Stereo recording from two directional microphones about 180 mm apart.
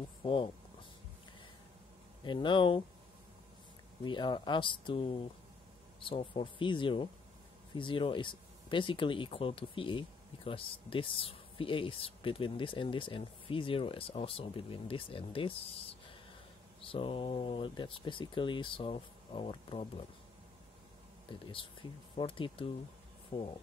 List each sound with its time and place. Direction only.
0.2 s speech: 30° left (ahead or behind)
2.2 s speech: 25° left (ahead or behind)
4.0 s speech: 25° left (ahead or behind)
21.3 s speech: 30° left (ahead or behind)